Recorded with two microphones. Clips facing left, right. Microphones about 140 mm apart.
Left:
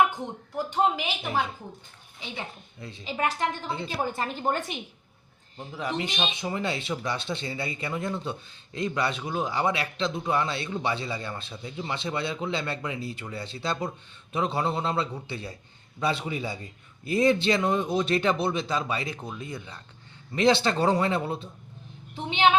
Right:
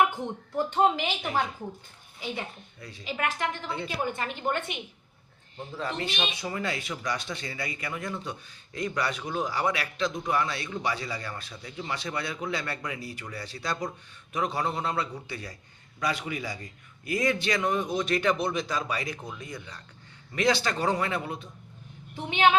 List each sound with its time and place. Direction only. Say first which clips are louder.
0.5 s speech: right 1 dB; 10° left (ahead or behind)
2.8 s a woman's voice: left 2 dB; 30° left (ahead or behind)
5.7 s speech: left 2 dB; 15° left (ahead or behind)
6.1 s a woman's voice: left 2 dB; 25° left (ahead or behind)